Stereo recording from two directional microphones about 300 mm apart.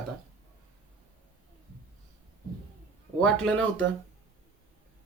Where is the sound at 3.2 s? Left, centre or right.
Centre.